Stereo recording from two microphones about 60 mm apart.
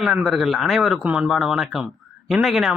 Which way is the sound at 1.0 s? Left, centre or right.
Right.